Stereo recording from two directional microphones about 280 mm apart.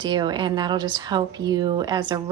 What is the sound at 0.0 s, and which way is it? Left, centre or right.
A woman's voice, centre.